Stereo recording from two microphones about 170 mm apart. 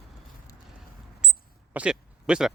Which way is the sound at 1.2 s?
5° right (ahead or behind).